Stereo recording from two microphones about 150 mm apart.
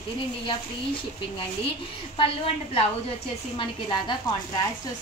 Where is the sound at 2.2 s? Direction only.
40° left (ahead or behind).